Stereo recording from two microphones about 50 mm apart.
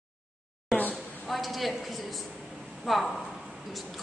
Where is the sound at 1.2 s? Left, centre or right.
Centre.